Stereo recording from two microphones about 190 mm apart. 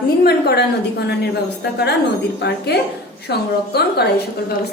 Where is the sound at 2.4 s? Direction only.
60° left (ahead or behind).